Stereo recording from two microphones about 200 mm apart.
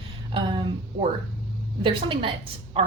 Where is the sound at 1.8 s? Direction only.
25° right (ahead or behind).